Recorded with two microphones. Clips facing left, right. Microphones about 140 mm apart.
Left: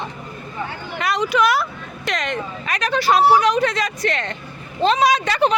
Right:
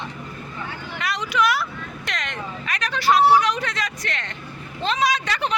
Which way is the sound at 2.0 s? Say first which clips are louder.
Left 8 dB; 35° left (ahead or behind).